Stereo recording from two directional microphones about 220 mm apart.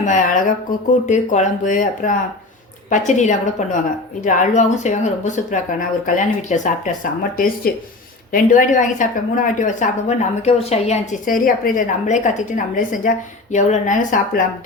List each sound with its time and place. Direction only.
0.0 s a woman's voice: 35° left (ahead or behind)